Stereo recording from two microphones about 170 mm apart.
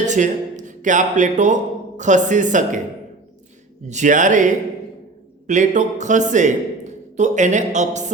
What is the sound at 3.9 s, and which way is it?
Speech, 45° right (ahead or behind).